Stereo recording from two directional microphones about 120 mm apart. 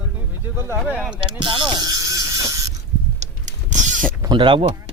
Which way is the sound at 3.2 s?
90° right.